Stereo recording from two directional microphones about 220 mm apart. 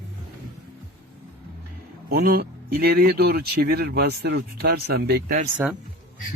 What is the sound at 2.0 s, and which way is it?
Speech, 45° right (ahead or behind).